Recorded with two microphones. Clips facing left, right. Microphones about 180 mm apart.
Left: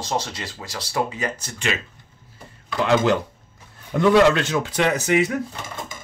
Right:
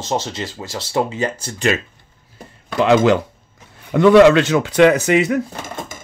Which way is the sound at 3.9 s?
80° right.